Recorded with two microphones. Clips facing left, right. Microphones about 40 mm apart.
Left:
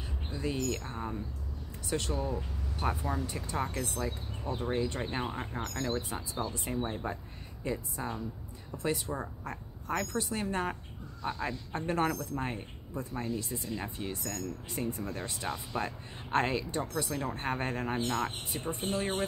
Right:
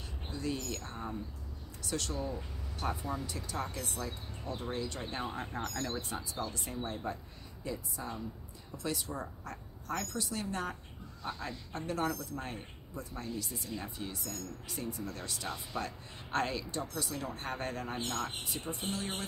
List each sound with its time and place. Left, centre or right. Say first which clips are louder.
0.3 s a sound: left 1 dB; left
0.8 s speech: left 3 dB; left
5.0 s speech: left 3 dB; centre